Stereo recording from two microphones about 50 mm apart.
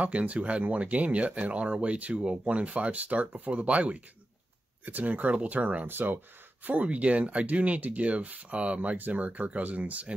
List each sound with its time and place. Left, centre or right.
0.0 s speech: right
5.9 s speech: right
6.6 s speech: right